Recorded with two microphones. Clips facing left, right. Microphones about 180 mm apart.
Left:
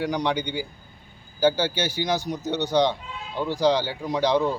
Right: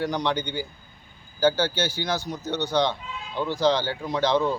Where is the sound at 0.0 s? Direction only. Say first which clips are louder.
Left 1 dB; 10° left (ahead or behind).